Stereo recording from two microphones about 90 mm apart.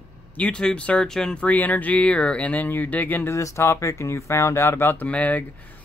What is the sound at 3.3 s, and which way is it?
Speech, 35° left (ahead or behind).